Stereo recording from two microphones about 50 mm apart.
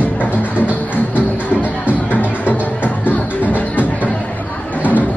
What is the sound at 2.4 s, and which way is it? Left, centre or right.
Music, left.